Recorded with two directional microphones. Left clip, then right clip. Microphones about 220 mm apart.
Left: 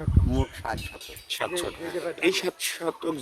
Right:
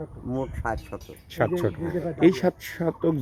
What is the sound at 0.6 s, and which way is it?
Speech, 60° left (ahead or behind).